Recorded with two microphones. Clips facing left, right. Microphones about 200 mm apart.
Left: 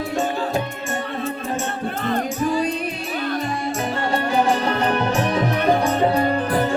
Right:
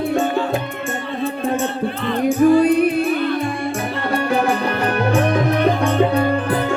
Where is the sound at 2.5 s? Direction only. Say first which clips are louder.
Right 9 dB; 55° right (ahead or behind).